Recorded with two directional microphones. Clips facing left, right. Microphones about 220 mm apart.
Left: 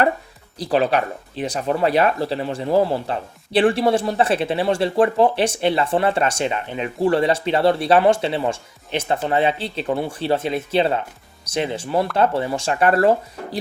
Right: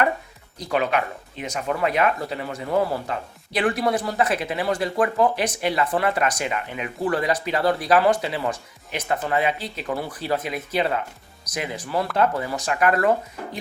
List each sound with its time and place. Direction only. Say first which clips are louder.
0.6 s speech: left 4 dB; 35° left (ahead or behind)